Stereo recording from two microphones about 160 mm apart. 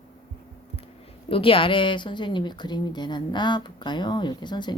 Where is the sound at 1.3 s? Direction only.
35° left (ahead or behind).